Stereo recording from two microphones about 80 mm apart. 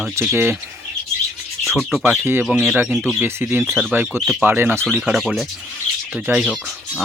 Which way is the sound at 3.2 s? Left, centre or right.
Right.